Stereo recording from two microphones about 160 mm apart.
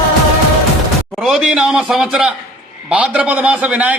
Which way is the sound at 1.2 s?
5° right (ahead or behind).